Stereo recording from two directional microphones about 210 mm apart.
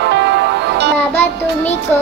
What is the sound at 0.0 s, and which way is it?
Music, 55° right (ahead or behind).